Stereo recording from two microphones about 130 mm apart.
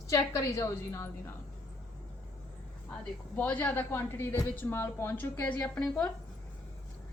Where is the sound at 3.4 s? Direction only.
10° left (ahead or behind).